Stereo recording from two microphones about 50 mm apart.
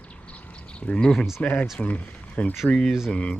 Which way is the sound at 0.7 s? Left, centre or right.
Centre.